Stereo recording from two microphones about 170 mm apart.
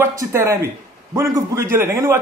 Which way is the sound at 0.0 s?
15° right (ahead or behind).